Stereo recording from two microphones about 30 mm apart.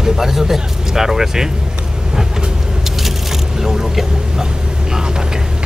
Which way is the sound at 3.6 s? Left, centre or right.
Centre.